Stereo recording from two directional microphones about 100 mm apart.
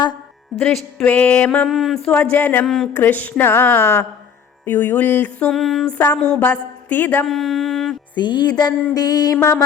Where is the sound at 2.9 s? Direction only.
20° left (ahead or behind).